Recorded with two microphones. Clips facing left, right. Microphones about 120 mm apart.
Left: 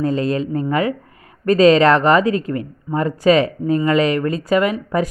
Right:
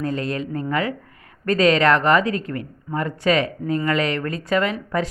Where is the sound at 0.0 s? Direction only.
25° left (ahead or behind).